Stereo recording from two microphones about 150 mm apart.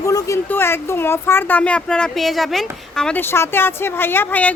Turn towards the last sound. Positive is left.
turn(degrees=10)  # may be behind; listen again after turning